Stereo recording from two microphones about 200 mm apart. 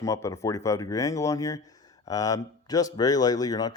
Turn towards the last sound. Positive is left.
turn(degrees=20)  # may be behind; listen again after turning